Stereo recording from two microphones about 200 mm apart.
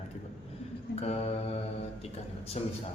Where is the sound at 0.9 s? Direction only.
30° left (ahead or behind).